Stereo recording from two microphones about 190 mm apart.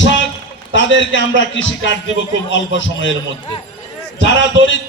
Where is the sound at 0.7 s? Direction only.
75° left (ahead or behind).